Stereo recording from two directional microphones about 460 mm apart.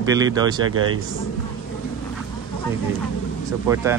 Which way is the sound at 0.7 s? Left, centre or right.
Right.